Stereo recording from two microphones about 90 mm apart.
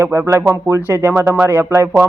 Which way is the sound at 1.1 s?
25° right (ahead or behind).